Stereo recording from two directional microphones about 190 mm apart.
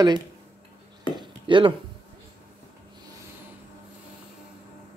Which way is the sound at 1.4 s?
25° right (ahead or behind).